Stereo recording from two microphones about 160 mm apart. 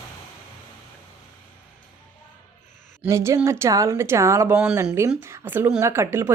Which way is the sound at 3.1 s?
20° right (ahead or behind).